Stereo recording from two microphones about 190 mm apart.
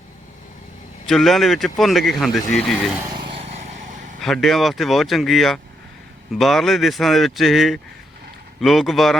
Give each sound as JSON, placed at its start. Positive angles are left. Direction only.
{"t": 1.0, "sound": "speech", "side_deg": 0}
{"t": 3.5, "sound": "vehicle", "side_deg": -40}
{"t": 4.2, "sound": "speech", "side_deg": 0}